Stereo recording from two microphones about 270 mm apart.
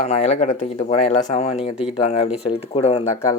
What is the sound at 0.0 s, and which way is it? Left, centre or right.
Speech, left.